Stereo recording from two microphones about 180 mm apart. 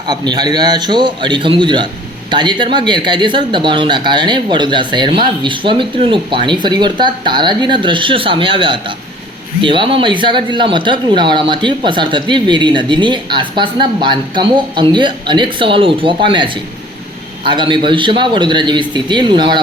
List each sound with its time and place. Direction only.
0.1 s speech: 25° right (ahead or behind)